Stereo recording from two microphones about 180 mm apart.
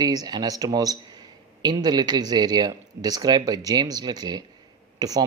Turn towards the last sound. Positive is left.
turn(degrees=-20)  # may be behind; listen again after turning